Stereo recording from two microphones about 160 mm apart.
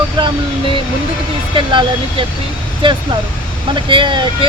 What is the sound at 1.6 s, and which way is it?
Speech, 30° right (ahead or behind).